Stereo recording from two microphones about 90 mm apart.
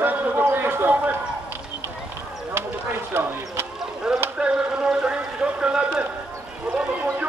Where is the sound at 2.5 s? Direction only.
25° right (ahead or behind).